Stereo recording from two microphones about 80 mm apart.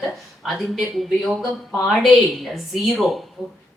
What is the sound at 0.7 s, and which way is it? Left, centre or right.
Speech, centre.